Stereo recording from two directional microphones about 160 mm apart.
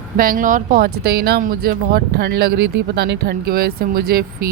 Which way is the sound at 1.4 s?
65° right (ahead or behind).